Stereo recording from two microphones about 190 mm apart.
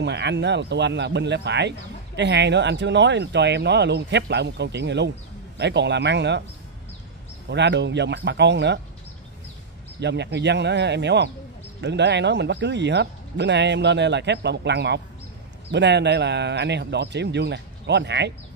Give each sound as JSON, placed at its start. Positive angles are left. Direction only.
{"t": 0.0, "sound": "speech", "side_deg": -65}
{"t": 7.4, "sound": "speech", "side_deg": -65}
{"t": 9.9, "sound": "speech", "side_deg": -65}